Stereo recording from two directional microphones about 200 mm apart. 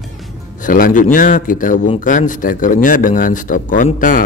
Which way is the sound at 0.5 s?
45° left (ahead or behind).